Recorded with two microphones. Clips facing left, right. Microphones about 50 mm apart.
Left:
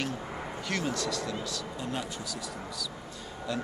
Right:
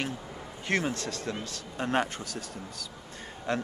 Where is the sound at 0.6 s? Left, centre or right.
Right.